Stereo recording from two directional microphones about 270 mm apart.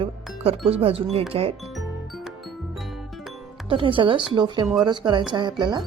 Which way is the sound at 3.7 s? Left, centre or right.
Centre.